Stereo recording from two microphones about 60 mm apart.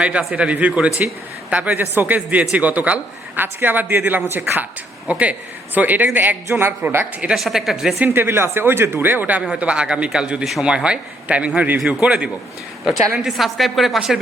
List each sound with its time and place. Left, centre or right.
0.0 s speech: centre; by 4.6 s right
5.0 s speech: right
6.5 s speech: right
7.3 s a woman's voice: centre
8.1 s speech: right
9.4 s speech: centre
13.2 s a woman's voice: centre